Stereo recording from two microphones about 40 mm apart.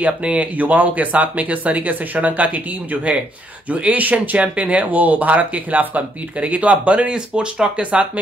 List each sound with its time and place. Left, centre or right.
0.2 s speech: right
0.6 s speech: right
7.1 s speech: right